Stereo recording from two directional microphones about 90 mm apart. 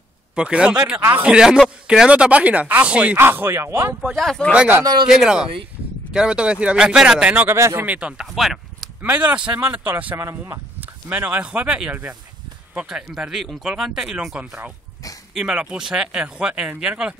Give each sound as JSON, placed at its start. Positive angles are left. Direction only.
{"t": 0.4, "sound": "speech", "side_deg": -10}
{"t": 3.2, "sound": "speech", "side_deg": -25}
{"t": 4.1, "sound": "speech", "side_deg": -5}
{"t": 4.6, "sound": "speech", "side_deg": -20}
{"t": 5.0, "sound": "speech", "side_deg": -5}
{"t": 7.5, "sound": "speech", "side_deg": -30}
{"t": 7.8, "sound": "speech", "side_deg": -15}
{"t": 9.0, "sound": "speech", "side_deg": -15}
{"t": 10.1, "sound": "speech", "side_deg": -30}